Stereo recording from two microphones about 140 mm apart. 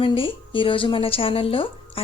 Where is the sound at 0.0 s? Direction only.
40° left (ahead or behind).